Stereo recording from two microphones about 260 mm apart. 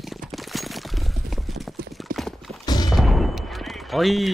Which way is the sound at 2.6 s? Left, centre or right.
Centre.